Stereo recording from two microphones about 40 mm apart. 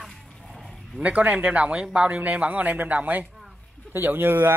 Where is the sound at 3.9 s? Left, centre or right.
Right.